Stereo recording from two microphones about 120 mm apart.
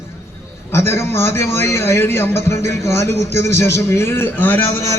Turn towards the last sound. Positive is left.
turn(degrees=15)  # may be behind; listen again after turning